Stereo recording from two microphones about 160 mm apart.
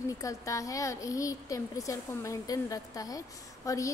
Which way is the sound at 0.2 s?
20° left (ahead or behind).